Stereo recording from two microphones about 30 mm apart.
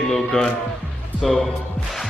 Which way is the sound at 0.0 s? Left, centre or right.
Centre.